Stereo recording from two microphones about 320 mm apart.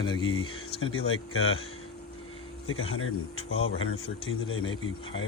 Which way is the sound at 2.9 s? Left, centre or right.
Left.